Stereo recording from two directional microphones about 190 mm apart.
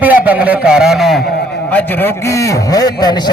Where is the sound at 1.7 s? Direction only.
10° left (ahead or behind).